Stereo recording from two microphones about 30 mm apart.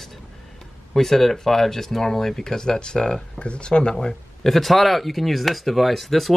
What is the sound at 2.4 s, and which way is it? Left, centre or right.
Speech, left.